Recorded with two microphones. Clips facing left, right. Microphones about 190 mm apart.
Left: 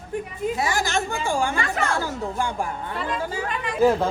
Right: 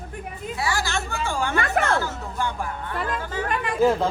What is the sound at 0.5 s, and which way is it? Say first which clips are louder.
A woman's voice: left 1 dB; 20° left (ahead or behind).